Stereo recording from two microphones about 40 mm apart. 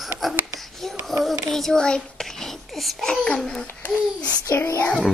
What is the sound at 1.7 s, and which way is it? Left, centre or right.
Speech, centre.